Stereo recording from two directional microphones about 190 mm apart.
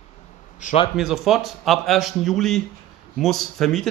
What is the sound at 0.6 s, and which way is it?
Speech, 40° left (ahead or behind).